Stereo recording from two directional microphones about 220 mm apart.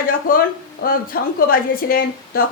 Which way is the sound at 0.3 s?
40° left (ahead or behind).